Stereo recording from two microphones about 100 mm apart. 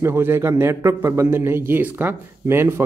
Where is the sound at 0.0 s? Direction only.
25° right (ahead or behind).